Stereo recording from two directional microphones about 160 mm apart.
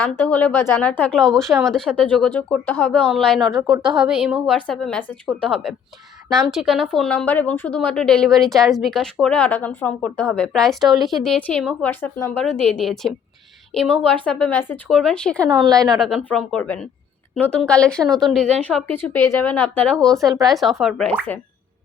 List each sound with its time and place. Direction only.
0.0 s speech: 10° left (ahead or behind)
15.4 s a woman's voice: 25° right (ahead or behind)
16.0 s speech: centre (ahead or behind)